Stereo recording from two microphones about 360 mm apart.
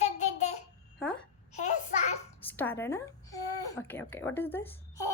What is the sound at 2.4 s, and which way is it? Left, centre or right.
Babbling, centre.